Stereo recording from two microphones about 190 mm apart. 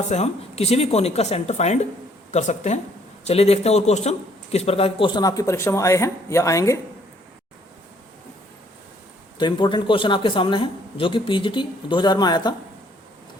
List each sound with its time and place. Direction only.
0.1 s speech: 35° left (ahead or behind); by 6.7 s 15° left (ahead or behind)
9.4 s a man's voice: 25° left (ahead or behind)